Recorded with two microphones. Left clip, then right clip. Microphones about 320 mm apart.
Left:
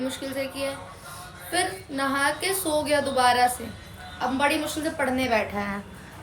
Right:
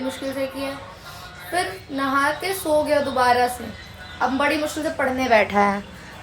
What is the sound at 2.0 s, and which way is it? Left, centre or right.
A woman's voice, centre.